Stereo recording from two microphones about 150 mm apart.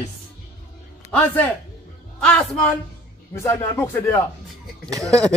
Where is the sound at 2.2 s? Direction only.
5° left (ahead or behind).